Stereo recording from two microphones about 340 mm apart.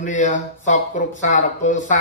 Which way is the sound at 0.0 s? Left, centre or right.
Left.